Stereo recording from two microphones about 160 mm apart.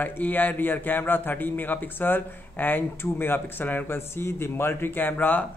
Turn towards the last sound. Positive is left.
turn(degrees=10)  # may be behind; listen again after turning